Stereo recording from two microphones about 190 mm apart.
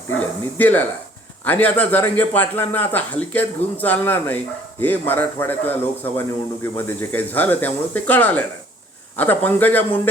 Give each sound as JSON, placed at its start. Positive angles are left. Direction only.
{"t": 0.2, "sound": "a man's voice", "side_deg": 10}